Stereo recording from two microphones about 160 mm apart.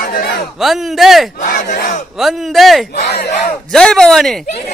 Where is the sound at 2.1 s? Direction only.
Centre (ahead or behind).